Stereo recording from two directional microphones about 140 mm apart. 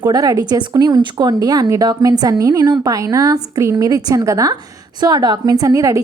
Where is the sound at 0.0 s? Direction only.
30° right (ahead or behind).